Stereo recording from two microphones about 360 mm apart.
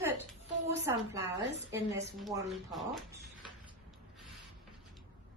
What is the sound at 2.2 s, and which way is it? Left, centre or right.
Speech, centre.